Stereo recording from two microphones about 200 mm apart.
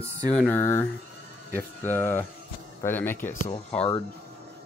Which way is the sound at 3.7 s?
5° left (ahead or behind).